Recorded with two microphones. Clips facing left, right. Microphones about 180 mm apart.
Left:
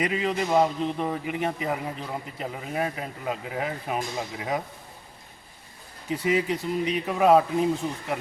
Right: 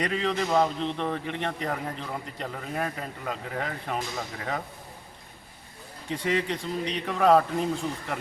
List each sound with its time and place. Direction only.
0.0 s a man's voice: 5° left (ahead or behind)
6.1 s a man's voice: 5° left (ahead or behind)